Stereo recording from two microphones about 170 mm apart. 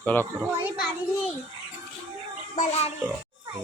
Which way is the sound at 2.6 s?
40° left (ahead or behind).